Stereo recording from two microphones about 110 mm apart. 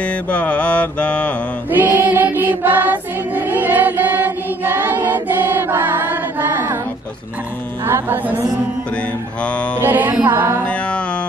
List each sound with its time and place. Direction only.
0.0 s mantra: 10° left (ahead or behind)
1.7 s choir: 15° right (ahead or behind)
7.8 s music: 20° right (ahead or behind)
9.4 s mantra: 10° left (ahead or behind)
9.8 s music: 15° right (ahead or behind)
10.6 s music: 10° left (ahead or behind)